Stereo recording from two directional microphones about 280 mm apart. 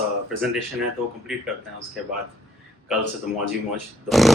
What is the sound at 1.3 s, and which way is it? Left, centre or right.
Speech, centre.